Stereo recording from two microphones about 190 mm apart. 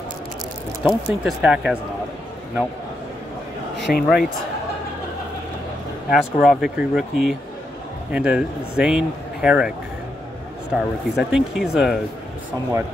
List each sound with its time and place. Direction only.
0.8 s speech: 5° right (ahead or behind)
3.8 s speech: 55° left (ahead or behind)
6.0 s speech: centre (ahead or behind)